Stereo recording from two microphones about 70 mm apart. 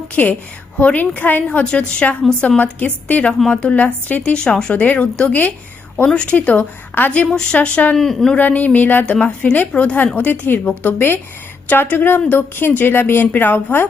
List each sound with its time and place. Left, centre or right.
0.2 s speech: left
6.1 s speech: centre
6.3 s speech: left
7.3 s speech: centre
7.9 s speech: centre
8.4 s speech: left
9.0 s speech: centre